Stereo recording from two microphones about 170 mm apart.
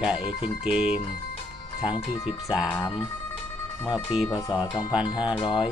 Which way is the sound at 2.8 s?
30° left (ahead or behind).